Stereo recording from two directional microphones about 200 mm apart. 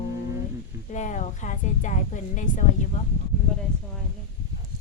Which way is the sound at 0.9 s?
35° left (ahead or behind).